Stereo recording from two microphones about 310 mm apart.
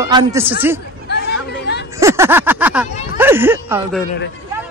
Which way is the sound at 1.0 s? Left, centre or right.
Left.